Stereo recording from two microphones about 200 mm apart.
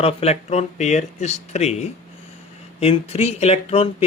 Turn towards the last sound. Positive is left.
turn(degrees=30)  # may be behind; listen again after turning